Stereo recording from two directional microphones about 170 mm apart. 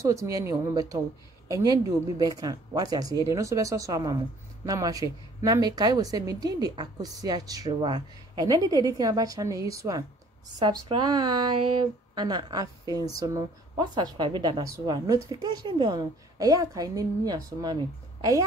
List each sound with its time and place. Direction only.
0.0 s a woman's voice: 20° right (ahead or behind)